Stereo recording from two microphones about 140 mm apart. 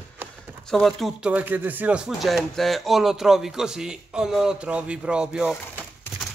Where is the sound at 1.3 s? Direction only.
10° right (ahead or behind).